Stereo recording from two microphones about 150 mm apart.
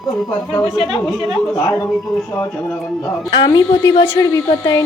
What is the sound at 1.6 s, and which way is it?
Speech, 20° left (ahead or behind).